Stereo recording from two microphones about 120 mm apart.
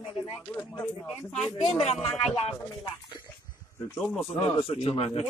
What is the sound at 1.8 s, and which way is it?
Speech, 60° left (ahead or behind).